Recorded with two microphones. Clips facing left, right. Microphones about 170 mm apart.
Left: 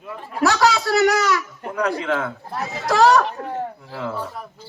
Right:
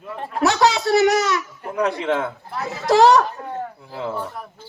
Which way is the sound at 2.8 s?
20° right (ahead or behind).